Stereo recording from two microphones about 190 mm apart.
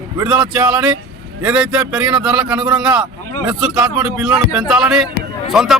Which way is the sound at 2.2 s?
5° right (ahead or behind).